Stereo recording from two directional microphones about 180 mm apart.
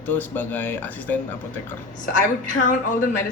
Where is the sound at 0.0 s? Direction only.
10° left (ahead or behind).